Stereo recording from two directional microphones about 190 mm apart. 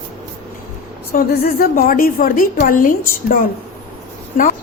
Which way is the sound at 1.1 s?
50° left (ahead or behind).